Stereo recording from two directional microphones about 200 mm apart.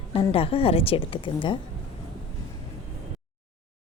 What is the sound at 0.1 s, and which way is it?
A woman's voice, 30° left (ahead or behind).